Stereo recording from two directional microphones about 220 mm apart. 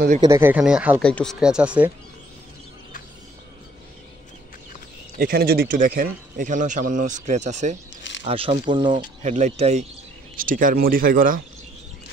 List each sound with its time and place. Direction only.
0.2 s speech: 10° right (ahead or behind)
5.2 s speech: 45° right (ahead or behind)